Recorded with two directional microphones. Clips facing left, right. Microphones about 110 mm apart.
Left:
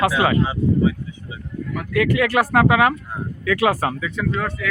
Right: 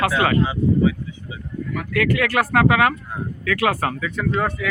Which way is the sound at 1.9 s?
20° left (ahead or behind).